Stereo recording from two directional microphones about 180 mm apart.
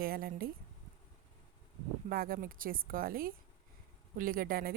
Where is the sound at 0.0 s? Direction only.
55° right (ahead or behind).